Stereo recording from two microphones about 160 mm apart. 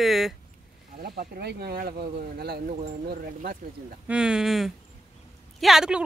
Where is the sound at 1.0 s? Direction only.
70° right (ahead or behind).